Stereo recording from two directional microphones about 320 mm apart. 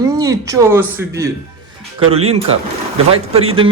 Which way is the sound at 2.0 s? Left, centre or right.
Right.